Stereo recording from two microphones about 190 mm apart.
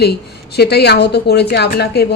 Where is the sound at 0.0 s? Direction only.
55° left (ahead or behind).